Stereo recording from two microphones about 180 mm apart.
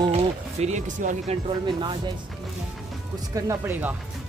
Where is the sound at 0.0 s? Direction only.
35° right (ahead or behind).